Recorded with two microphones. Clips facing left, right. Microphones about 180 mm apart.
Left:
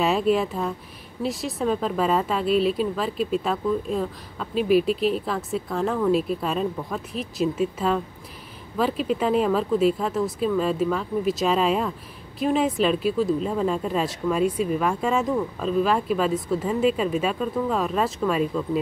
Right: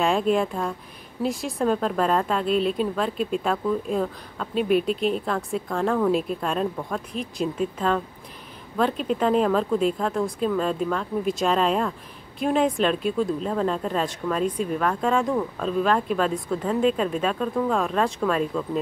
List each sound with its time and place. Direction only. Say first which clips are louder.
0.0 s speech: even; 5° left (ahead or behind)